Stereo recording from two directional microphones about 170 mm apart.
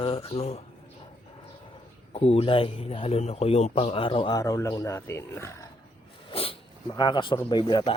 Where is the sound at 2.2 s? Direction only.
35° left (ahead or behind); by 5.7 s 15° left (ahead or behind).